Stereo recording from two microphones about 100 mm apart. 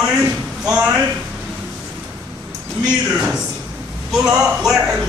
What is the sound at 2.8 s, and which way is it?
Speech, 10° right (ahead or behind).